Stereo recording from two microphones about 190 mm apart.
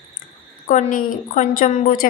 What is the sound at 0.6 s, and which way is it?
A woman's voice, 45° left (ahead or behind).